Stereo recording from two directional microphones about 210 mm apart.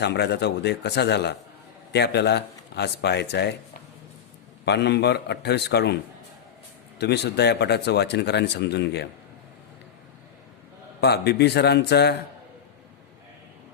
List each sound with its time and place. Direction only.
0.0 s speech: 50° left (ahead or behind)
4.6 s speech: 55° left (ahead or behind)
7.0 s speech: 55° left (ahead or behind)
11.0 s speech: 50° left (ahead or behind)